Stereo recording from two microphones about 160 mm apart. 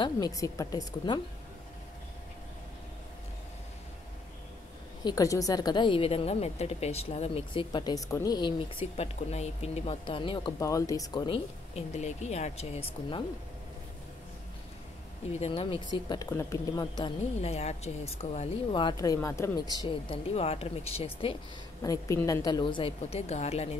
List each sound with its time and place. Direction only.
0.0 s speech: 25° left (ahead or behind)
5.0 s a woman's voice: 20° left (ahead or behind)
10.6 s a woman's voice: 20° left (ahead or behind); by 13.2 s 40° left (ahead or behind)
15.3 s a woman's voice: 40° left (ahead or behind)
17.4 s a woman's voice: 45° left (ahead or behind)
21.8 s a woman's voice: 20° left (ahead or behind); by 23.8 s 40° left (ahead or behind)